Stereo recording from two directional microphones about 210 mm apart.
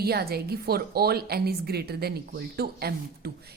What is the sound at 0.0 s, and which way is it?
A woman's voice, 50° right (ahead or behind).